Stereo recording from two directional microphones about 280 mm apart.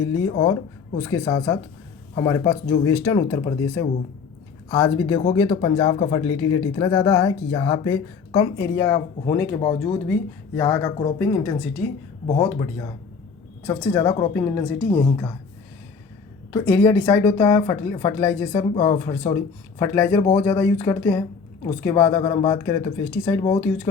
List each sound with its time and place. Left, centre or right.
0.0 s speech: centre
16.5 s speech: centre